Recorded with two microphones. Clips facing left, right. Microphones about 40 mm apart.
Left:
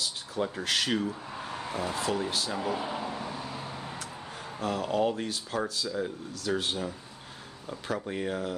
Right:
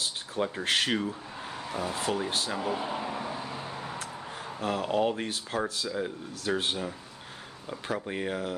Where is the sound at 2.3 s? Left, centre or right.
Right.